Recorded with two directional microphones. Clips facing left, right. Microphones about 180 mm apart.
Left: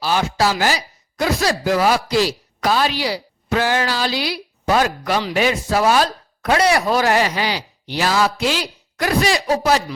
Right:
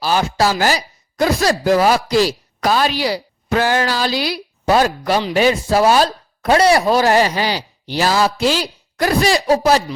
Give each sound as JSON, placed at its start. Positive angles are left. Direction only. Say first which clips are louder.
{"t": 0.0, "sound": "speech", "louder": "right 2 dB", "side_deg": -40}